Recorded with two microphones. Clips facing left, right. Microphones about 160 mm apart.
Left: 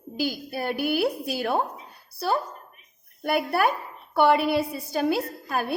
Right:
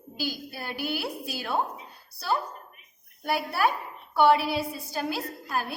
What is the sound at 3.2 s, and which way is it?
A woman's voice, 55° left (ahead or behind).